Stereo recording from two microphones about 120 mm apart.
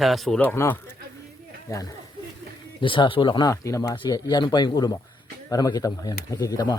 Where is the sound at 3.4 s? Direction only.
25° left (ahead or behind).